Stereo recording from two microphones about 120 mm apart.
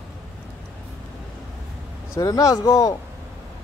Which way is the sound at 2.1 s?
30° left (ahead or behind).